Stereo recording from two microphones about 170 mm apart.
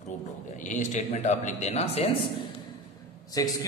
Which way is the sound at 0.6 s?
45° left (ahead or behind).